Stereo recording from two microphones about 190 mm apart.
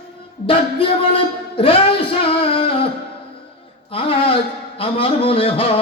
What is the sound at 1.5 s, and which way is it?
Music, 30° left (ahead or behind).